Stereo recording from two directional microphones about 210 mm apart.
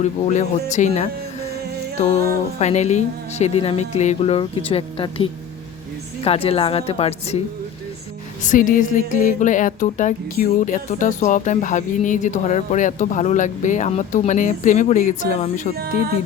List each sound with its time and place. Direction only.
0.0 s speech: 35° left (ahead or behind)
2.6 s speech: 30° left (ahead or behind)
8.4 s speech: 40° left (ahead or behind)